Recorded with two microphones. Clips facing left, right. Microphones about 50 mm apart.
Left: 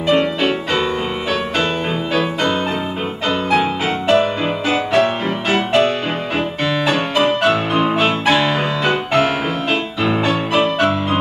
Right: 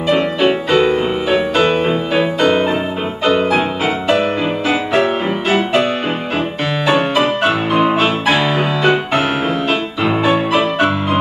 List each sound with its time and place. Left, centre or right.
0.1 s music: centre
0.7 s music: centre
6.9 s music: centre